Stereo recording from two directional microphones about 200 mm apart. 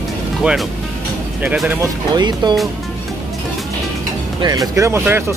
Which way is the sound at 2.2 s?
20° right (ahead or behind).